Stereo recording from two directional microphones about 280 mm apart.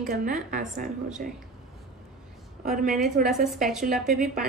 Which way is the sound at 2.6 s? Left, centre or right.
Right.